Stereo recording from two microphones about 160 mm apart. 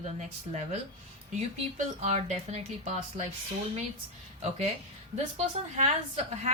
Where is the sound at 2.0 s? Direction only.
45° right (ahead or behind).